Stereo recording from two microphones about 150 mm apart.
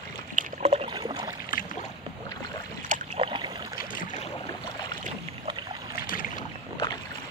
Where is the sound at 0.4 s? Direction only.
50° right (ahead or behind).